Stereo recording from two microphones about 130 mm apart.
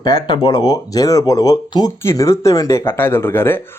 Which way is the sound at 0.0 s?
30° left (ahead or behind).